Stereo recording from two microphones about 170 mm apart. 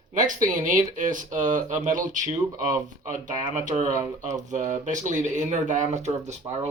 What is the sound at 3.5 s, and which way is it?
Speech, 50° right (ahead or behind).